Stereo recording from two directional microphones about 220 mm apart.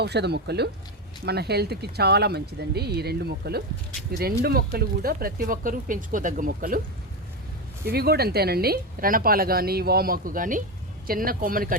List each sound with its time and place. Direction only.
0.0 s speech: 50° right (ahead or behind)
7.9 s speech: 45° right (ahead or behind)